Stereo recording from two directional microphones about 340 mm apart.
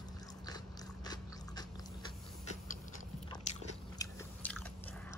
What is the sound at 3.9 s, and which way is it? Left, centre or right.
Biting, centre.